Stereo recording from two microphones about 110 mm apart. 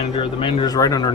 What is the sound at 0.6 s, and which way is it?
Speech, 35° left (ahead or behind).